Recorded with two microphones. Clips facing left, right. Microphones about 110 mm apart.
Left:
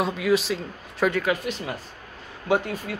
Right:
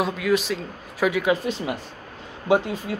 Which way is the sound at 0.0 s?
Centre (ahead or behind).